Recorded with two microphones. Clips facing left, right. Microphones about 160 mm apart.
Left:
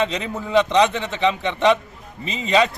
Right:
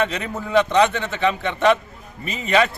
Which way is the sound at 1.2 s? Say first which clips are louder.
Left 1 dB; 20° left (ahead or behind).